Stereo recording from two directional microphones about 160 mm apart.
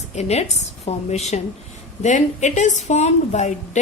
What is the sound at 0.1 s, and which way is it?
A woman's voice, 45° left (ahead or behind).